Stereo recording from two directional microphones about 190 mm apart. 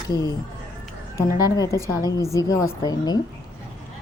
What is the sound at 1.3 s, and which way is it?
A woman's voice, 20° left (ahead or behind).